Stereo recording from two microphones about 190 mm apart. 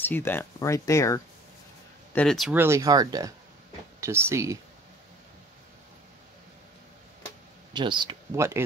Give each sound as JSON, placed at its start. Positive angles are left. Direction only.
{"t": 0.0, "sound": "speech", "side_deg": 10}
{"t": 2.1, "sound": "speech", "side_deg": 0}
{"t": 2.5, "sound": "speech", "side_deg": -15}
{"t": 7.7, "sound": "speech", "side_deg": -25}